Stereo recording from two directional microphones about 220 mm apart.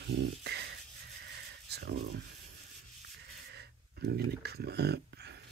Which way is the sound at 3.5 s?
45° right (ahead or behind).